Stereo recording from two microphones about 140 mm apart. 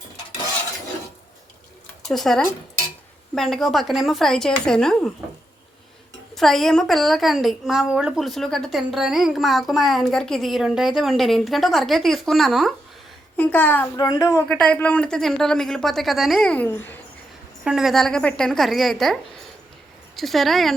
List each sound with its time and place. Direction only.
2.0 s a woman's voice: 5° left (ahead or behind)
6.3 s a woman's voice: centre (ahead or behind)
13.3 s a child's voice: 10° left (ahead or behind)
13.9 s speech: 25° left (ahead or behind)
14.4 s a woman's voice: 10° left (ahead or behind)
17.6 s a woman's voice: 5° right (ahead or behind)
20.1 s a woman's voice: centre (ahead or behind)